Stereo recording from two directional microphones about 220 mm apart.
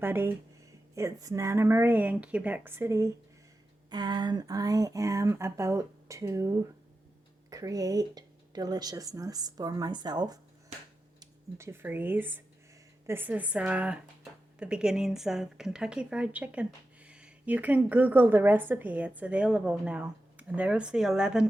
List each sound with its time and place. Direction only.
0.0 s a woman's voice: 10° right (ahead or behind)